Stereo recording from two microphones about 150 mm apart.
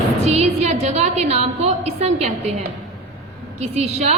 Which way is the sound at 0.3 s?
45° right (ahead or behind).